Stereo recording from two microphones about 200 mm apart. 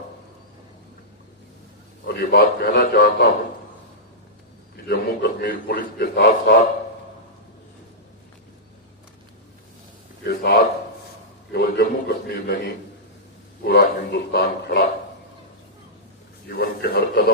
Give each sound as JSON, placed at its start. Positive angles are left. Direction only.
{"t": 2.0, "sound": "a man's voice", "side_deg": 50}
{"t": 4.9, "sound": "a man's voice", "side_deg": 50}
{"t": 10.2, "sound": "a man's voice", "side_deg": 55}
{"t": 13.7, "sound": "a man's voice", "side_deg": 55}
{"t": 16.5, "sound": "a man's voice", "side_deg": 50}